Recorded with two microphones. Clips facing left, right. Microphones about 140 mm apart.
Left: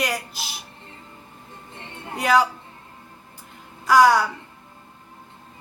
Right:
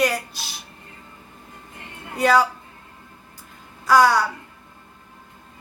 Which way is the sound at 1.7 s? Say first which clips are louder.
Left 2 dB; 30° left (ahead or behind).